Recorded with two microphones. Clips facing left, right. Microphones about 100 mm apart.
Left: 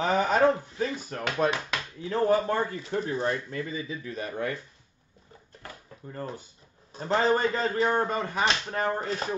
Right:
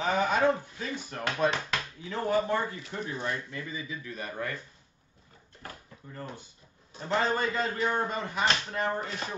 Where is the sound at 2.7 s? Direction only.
40° left (ahead or behind).